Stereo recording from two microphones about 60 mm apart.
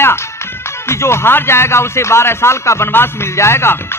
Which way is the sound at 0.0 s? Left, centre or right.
Left.